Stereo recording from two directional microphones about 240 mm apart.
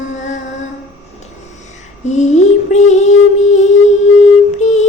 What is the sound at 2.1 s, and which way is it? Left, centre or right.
Child singing, left.